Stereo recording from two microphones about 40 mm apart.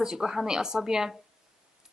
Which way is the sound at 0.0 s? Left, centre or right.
Centre.